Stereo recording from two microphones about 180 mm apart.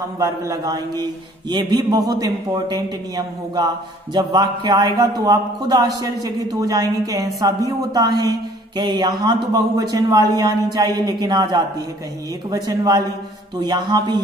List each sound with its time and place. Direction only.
0.2 s speech: 20° right (ahead or behind)